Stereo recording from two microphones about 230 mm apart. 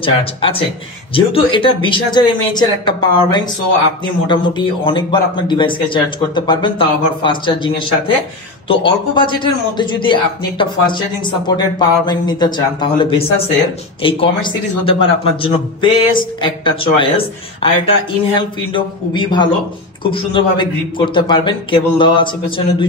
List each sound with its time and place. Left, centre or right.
0.0 s a man's voice: left